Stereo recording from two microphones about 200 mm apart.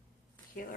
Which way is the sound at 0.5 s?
45° left (ahead or behind).